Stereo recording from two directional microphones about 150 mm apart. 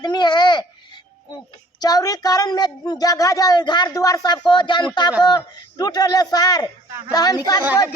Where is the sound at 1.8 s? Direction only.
25° left (ahead or behind).